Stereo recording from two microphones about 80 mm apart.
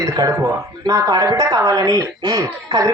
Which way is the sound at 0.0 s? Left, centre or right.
Right.